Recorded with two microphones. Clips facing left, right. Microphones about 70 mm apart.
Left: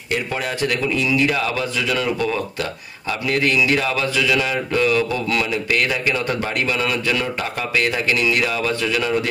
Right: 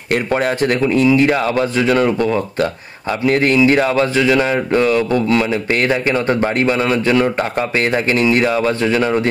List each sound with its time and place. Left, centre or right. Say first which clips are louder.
0.1 s speech: right 7 dB; right